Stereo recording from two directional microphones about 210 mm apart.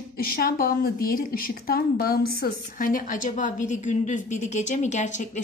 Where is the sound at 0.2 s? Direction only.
45° left (ahead or behind).